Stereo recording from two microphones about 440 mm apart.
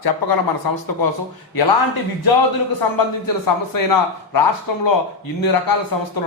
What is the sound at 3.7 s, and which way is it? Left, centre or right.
Speech, left.